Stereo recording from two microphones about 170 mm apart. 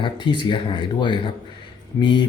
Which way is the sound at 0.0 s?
25° left (ahead or behind).